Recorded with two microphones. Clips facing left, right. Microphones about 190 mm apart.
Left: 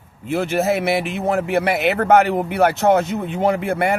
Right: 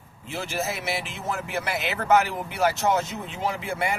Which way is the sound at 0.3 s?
60° left (ahead or behind).